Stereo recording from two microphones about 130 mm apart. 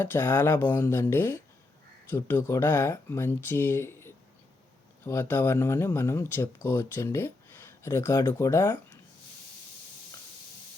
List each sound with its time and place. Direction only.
0.0 s speech: 15° left (ahead or behind)